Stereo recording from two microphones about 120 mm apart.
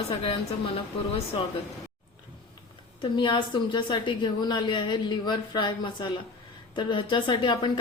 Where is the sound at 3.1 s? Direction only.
40° left (ahead or behind).